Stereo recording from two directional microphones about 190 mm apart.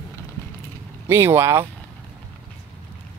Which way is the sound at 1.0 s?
15° right (ahead or behind).